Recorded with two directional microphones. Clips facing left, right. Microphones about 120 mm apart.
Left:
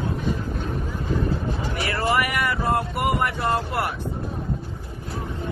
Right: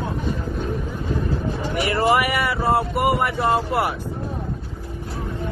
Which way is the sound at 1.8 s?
15° right (ahead or behind).